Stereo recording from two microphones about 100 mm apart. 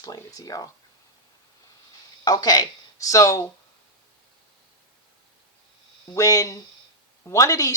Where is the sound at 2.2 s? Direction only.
40° left (ahead or behind).